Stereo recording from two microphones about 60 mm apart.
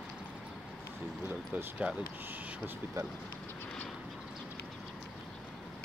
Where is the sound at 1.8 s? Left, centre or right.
Centre.